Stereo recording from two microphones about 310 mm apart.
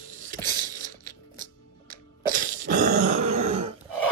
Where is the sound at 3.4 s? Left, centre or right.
Right.